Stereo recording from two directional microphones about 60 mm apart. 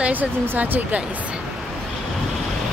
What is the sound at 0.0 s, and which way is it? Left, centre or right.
Speech, right.